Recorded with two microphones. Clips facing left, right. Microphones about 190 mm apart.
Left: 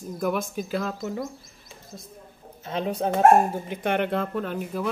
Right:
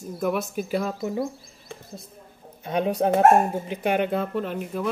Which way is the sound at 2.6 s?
15° right (ahead or behind).